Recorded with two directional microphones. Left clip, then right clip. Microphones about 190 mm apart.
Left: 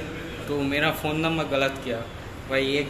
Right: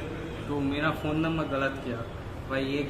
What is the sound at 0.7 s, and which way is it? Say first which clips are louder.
A man's voice: left 5 dB; centre (ahead or behind).